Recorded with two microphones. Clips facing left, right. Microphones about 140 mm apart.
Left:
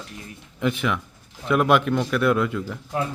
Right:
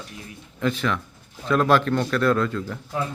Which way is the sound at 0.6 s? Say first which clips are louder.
Even; 15° left (ahead or behind).